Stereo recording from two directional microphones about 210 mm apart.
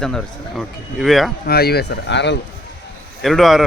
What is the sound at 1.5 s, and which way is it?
Speech, 50° left (ahead or behind).